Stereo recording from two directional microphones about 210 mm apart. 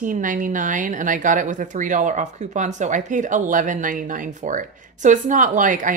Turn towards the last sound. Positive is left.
turn(degrees=-40)  # may be behind; listen again after turning